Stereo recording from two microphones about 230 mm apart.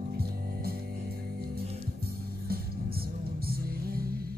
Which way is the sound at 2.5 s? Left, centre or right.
Right.